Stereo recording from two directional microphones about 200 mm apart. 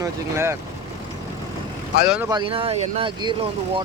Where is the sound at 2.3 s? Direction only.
25° right (ahead or behind).